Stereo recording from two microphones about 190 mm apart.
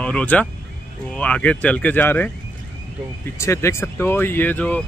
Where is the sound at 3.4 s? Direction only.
15° left (ahead or behind).